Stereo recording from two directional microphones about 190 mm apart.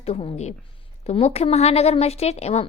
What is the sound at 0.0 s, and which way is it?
A woman's voice, 30° left (ahead or behind).